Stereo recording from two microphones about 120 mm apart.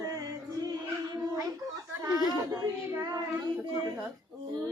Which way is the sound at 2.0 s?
30° right (ahead or behind).